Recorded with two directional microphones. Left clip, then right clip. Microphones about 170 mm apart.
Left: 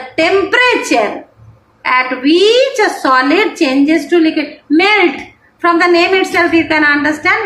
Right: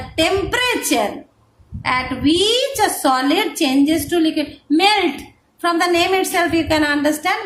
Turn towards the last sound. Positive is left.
turn(degrees=-75)  # may be behind; listen again after turning